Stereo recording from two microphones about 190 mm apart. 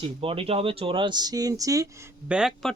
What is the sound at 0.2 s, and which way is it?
Speech, 30° right (ahead or behind).